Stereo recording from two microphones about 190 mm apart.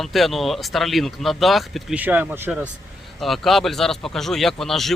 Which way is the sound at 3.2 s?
Centre (ahead or behind).